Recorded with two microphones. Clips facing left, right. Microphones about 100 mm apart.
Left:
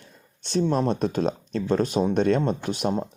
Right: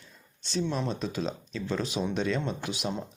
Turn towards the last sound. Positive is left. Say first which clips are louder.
# left 7 dB
turn(degrees=50)  # may be behind; listen again after turning